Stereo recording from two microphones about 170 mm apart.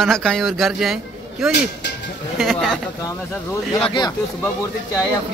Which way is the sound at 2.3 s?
Centre (ahead or behind).